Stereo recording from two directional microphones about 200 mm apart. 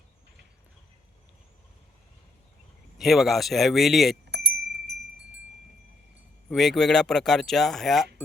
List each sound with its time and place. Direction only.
3.0 s speech: centre (ahead or behind)
4.3 s a sound: 60° right (ahead or behind)
6.5 s speech: centre (ahead or behind)